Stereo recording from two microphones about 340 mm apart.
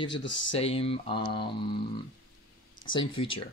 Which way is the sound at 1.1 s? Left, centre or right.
Left.